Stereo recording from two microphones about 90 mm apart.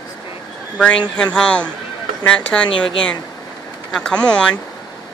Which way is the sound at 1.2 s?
10° left (ahead or behind).